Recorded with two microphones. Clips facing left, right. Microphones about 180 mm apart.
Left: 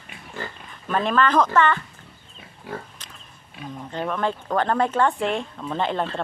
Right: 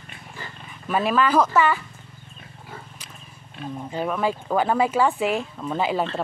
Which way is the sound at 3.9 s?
5° right (ahead or behind).